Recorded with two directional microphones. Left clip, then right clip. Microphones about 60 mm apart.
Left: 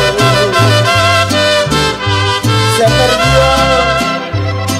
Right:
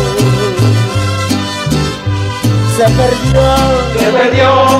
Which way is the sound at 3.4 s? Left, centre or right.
Left.